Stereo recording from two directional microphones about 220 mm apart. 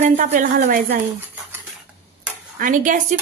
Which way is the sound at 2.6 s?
35° right (ahead or behind).